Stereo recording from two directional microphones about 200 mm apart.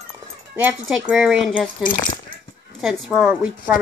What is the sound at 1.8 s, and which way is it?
Speech, 45° left (ahead or behind).